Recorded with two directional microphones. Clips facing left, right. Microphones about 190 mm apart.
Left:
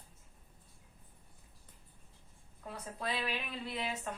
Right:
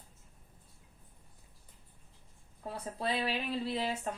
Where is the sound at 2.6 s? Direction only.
30° right (ahead or behind).